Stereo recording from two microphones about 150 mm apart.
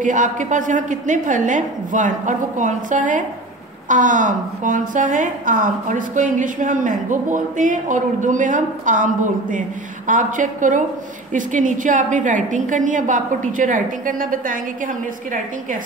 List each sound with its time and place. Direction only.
0.0 s a woman's voice: 60° right (ahead or behind)